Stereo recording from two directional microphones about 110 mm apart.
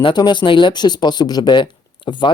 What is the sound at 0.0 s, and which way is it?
Speech, 45° left (ahead or behind).